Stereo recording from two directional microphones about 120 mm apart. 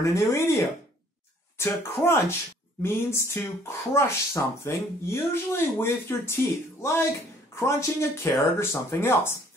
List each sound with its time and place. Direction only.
0.0 s speech: 25° left (ahead or behind)
1.6 s speech: 20° left (ahead or behind)